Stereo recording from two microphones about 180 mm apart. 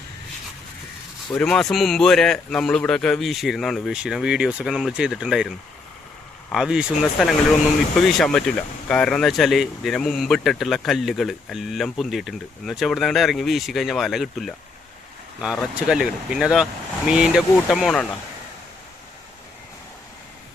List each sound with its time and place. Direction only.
1.3 s speech: 5° left (ahead or behind)
6.5 s speech: 5° right (ahead or behind)